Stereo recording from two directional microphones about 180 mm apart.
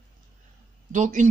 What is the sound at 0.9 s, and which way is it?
Speech, 45° right (ahead or behind).